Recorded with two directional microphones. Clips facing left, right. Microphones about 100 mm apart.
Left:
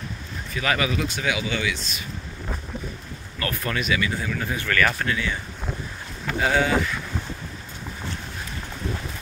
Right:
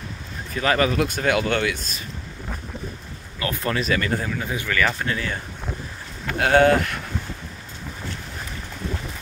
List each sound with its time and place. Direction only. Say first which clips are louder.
0.6 s speech: right 4 dB; 40° right (ahead or behind)
3.3 s speech: right 3 dB; 25° right (ahead or behind)
3.9 s speech: even; 45° right (ahead or behind)
4.4 s speech: left 4 dB; 20° right (ahead or behind)
5.0 s speech: even; 40° right (ahead or behind)
6.4 s speech: right 5 dB; 60° right (ahead or behind)